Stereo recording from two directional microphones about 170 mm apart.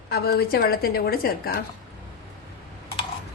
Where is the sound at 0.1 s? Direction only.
65° left (ahead or behind).